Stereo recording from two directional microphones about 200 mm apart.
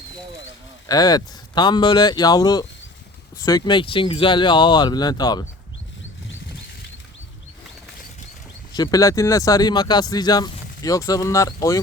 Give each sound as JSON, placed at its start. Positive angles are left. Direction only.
{"t": 0.9, "sound": "speech", "side_deg": 20}
{"t": 8.7, "sound": "speech", "side_deg": 20}